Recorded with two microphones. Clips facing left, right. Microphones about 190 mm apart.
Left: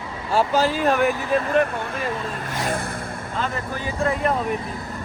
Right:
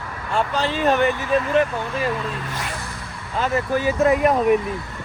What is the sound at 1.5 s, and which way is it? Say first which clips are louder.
Speech: even; 55° left (ahead or behind).